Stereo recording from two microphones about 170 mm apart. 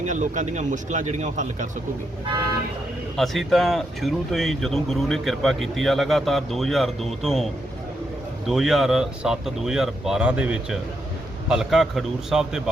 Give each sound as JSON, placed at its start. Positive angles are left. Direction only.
{"t": 0.0, "sound": "a man's voice", "side_deg": -45}
{"t": 3.2, "sound": "speech", "side_deg": 0}
{"t": 8.4, "sound": "speech", "side_deg": 0}